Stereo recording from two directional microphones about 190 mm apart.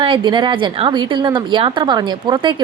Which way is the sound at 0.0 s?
25° right (ahead or behind).